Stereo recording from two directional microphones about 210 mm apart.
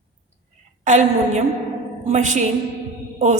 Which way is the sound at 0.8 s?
35° right (ahead or behind).